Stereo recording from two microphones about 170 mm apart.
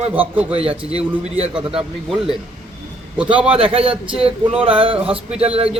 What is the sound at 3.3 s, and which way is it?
Speech, 10° right (ahead or behind).